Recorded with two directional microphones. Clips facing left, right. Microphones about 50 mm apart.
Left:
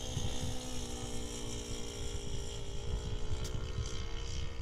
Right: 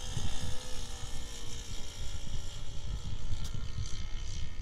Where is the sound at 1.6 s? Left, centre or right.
Left.